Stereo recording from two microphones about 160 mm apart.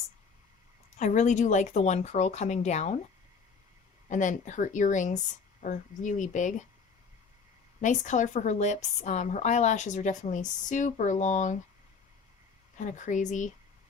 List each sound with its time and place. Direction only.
0.9 s a woman's voice: 50° left (ahead or behind)
4.1 s a woman's voice: 50° left (ahead or behind)
7.8 s a woman's voice: 50° left (ahead or behind)
12.7 s a woman's voice: 50° left (ahead or behind)